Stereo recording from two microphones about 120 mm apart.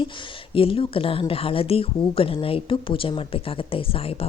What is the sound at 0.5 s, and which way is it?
Speech, 50° left (ahead or behind).